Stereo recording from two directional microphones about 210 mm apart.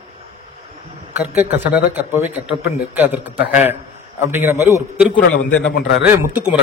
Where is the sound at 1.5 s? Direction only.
10° right (ahead or behind).